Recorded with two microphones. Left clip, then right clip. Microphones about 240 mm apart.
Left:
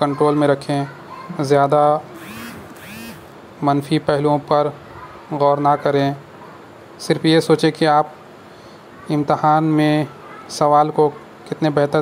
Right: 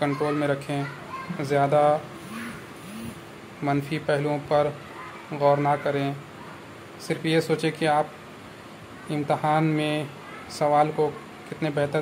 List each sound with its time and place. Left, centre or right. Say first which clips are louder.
0.0 s speech: left 9 dB; left
3.9 s speech: left 8 dB; left
9.1 s speech: left 8 dB; left